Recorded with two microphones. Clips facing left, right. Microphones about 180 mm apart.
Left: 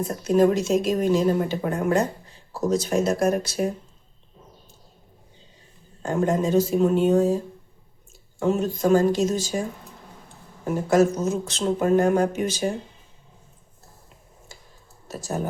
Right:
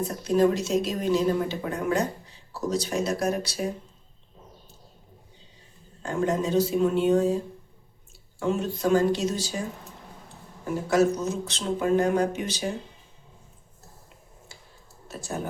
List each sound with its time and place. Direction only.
0.3 s speech: 50° left (ahead or behind)
6.0 s speech: 45° left (ahead or behind)
8.4 s speech: 40° left (ahead or behind)
10.8 s speech: 45° left (ahead or behind)
15.0 s speech: 40° left (ahead or behind)